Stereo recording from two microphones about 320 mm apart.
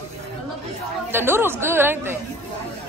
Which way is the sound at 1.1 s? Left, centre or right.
Centre.